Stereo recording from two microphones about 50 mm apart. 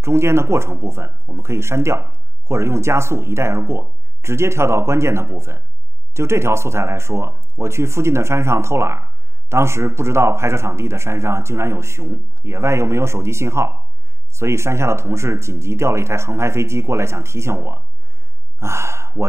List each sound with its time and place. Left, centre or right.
0.0 s a man's voice: right